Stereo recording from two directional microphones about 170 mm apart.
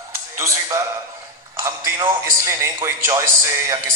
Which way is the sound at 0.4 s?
15° right (ahead or behind).